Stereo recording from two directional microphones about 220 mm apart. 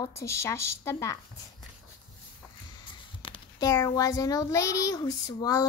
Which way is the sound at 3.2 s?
20° left (ahead or behind).